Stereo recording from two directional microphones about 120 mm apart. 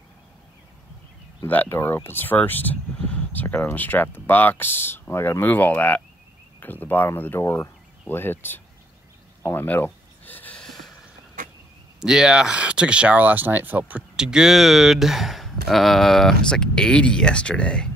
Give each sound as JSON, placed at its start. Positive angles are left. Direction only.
{"t": 1.4, "sound": "speech", "side_deg": 15}
{"t": 10.2, "sound": "a sound", "side_deg": 15}
{"t": 12.0, "sound": "speech", "side_deg": -5}